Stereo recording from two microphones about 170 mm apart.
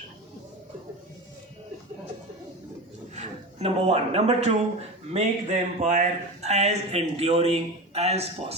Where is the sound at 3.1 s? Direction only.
40° right (ahead or behind).